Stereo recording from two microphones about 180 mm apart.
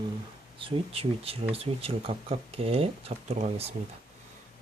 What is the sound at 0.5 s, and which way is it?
Speech, 30° right (ahead or behind).